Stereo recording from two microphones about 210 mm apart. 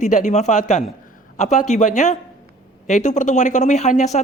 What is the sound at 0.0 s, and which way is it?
Speech, 35° left (ahead or behind).